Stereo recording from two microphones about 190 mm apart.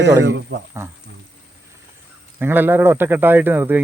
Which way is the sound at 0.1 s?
15° right (ahead or behind).